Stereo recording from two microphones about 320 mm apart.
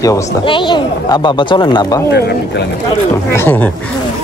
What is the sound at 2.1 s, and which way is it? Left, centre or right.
Speech, left.